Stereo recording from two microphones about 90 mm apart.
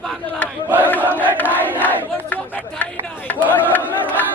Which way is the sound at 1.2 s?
20° right (ahead or behind).